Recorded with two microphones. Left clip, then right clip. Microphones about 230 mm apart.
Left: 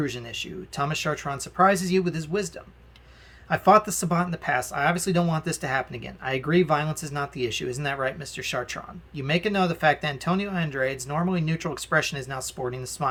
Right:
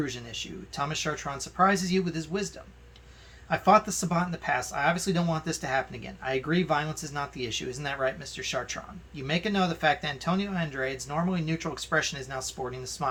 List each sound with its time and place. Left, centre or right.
0.0 s speech: left
3.5 s speech: left